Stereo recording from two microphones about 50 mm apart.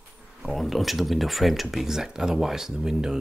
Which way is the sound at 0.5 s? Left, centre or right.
Centre.